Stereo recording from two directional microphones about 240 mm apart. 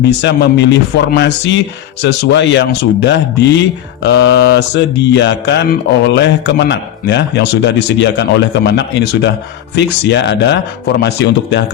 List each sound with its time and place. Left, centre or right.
0.2 s speech: left